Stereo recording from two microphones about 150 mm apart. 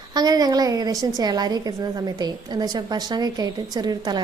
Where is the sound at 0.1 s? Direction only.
25° right (ahead or behind).